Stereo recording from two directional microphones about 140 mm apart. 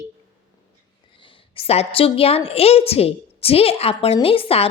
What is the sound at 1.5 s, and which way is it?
A woman's voice, 45° left (ahead or behind).